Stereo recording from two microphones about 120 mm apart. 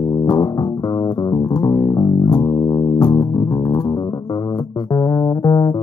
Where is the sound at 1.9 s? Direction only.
25° left (ahead or behind).